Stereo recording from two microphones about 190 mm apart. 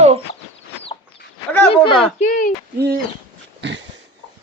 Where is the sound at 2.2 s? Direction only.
45° left (ahead or behind).